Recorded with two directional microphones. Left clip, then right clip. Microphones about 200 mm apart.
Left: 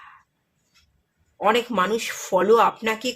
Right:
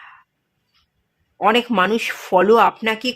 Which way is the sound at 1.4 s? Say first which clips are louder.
Right 4 dB; 25° right (ahead or behind).